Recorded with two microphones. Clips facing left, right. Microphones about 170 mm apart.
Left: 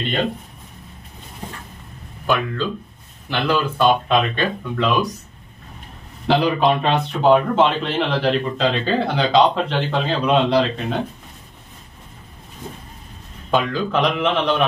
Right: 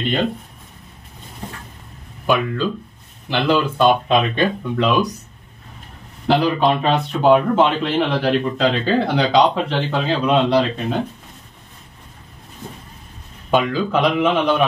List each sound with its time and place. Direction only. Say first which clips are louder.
2.2 s speech: right 2 dB; 15° right (ahead or behind)
6.2 s speech: right 1 dB; centre (ahead or behind)
13.5 s speech: right 2 dB; 10° right (ahead or behind)